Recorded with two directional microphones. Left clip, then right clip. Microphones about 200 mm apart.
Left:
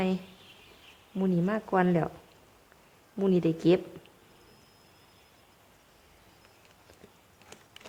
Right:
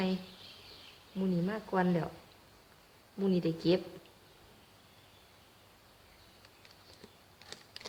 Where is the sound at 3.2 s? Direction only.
45° left (ahead or behind).